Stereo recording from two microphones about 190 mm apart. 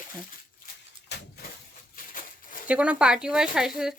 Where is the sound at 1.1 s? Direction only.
65° left (ahead or behind).